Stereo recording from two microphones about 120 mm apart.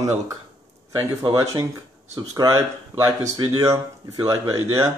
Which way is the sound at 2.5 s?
25° right (ahead or behind).